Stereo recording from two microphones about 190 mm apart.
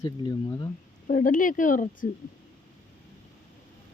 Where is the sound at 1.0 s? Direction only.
45° left (ahead or behind).